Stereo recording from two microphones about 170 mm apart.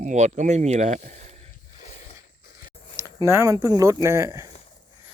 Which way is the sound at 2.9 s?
15° right (ahead or behind).